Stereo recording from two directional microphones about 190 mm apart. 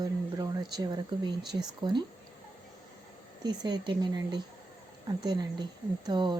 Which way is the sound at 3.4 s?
20° right (ahead or behind).